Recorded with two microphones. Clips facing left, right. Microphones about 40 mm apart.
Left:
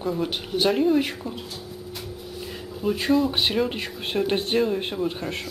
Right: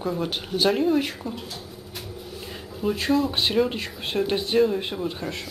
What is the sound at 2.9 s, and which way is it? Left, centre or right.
Speech, centre.